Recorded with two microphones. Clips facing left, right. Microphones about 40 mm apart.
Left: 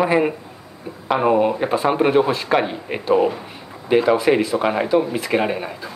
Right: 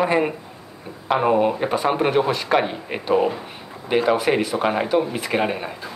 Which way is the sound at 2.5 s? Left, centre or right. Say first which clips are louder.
Left 1 dB; centre.